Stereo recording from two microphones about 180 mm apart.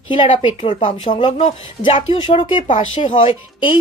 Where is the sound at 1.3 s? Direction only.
40° left (ahead or behind).